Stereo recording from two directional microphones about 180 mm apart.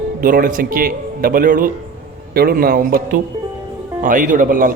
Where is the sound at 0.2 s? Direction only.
50° right (ahead or behind).